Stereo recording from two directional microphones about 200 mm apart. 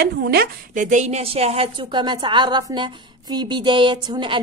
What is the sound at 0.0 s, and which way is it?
A woman's voice, 50° right (ahead or behind).